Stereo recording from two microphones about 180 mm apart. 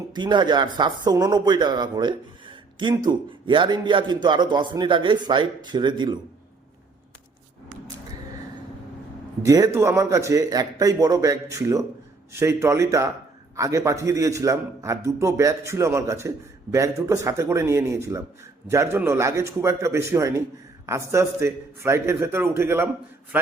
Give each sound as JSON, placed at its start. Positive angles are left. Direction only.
{"t": 0.1, "sound": "a man's voice", "side_deg": -25}
{"t": 9.4, "sound": "a man's voice", "side_deg": -20}